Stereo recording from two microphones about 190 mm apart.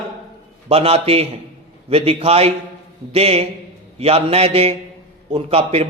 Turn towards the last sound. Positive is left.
turn(degrees=-30)  # may be behind; listen again after turning